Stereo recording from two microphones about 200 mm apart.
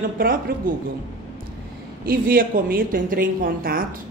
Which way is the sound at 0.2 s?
45° right (ahead or behind).